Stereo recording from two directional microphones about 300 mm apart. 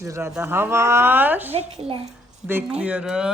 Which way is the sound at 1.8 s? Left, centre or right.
Centre.